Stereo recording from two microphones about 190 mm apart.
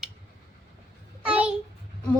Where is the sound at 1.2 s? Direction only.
5° right (ahead or behind).